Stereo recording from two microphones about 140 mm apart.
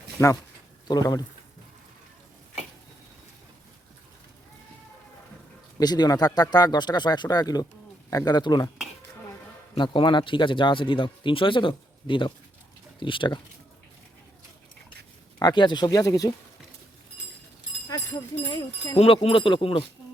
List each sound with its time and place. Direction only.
0.9 s speech: 30° left (ahead or behind)
5.8 s speech: 30° left (ahead or behind)
9.7 s speech: 35° left (ahead or behind)
15.4 s speech: 30° left (ahead or behind)
17.8 s speech: 25° left (ahead or behind)
18.9 s speech: 40° left (ahead or behind)